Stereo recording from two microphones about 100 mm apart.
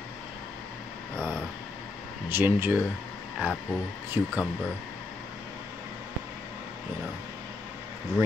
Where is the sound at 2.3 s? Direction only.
20° right (ahead or behind).